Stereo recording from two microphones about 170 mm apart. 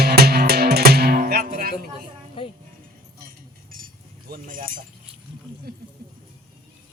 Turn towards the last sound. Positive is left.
turn(degrees=-65)  # may be behind; listen again after turning